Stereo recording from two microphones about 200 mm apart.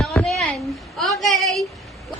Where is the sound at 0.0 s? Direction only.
Centre (ahead or behind).